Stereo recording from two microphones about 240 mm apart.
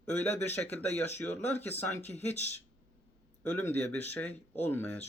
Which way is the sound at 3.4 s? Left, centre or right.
Centre.